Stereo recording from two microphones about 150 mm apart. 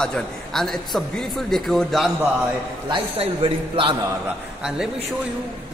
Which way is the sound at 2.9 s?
40° right (ahead or behind).